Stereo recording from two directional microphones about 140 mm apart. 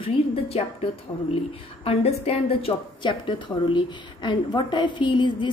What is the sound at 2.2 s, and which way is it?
A woman's voice, 40° left (ahead or behind).